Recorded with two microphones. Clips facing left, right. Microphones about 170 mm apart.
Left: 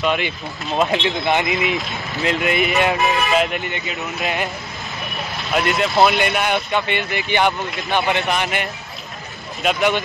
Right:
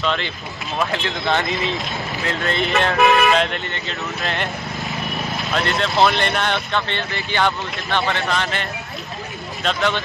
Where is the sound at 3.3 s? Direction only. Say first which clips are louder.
Left 1 dB; 5° left (ahead or behind).